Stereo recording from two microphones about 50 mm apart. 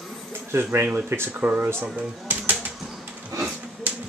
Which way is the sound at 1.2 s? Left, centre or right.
Right.